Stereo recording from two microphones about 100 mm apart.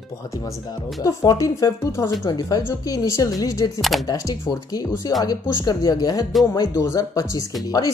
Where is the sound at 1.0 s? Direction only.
35° left (ahead or behind).